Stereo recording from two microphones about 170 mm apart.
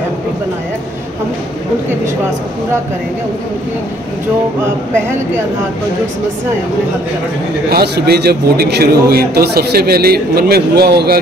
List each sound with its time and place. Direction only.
7.7 s a man's voice: 70° right (ahead or behind)